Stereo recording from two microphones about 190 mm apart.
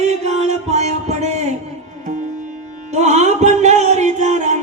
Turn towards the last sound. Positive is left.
turn(degrees=-35)  # may be behind; listen again after turning